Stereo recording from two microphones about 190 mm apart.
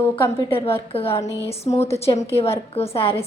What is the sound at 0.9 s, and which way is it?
Speech, 30° left (ahead or behind).